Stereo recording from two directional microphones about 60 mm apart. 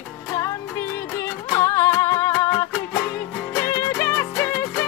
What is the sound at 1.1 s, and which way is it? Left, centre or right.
Music, left.